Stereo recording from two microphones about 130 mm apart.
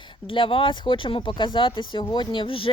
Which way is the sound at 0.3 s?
45° left (ahead or behind).